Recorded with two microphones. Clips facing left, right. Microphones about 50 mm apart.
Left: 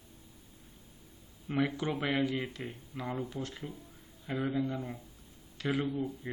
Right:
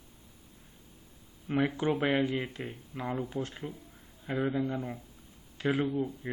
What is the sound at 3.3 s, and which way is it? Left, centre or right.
Speech, right.